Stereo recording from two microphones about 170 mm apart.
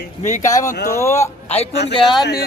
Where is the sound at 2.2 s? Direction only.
65° left (ahead or behind).